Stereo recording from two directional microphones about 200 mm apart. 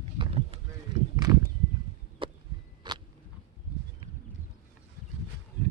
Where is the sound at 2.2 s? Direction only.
25° right (ahead or behind).